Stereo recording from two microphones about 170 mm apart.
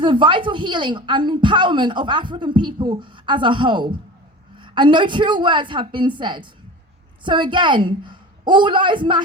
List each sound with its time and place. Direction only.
0.0 s a woman's voice: 30° right (ahead or behind)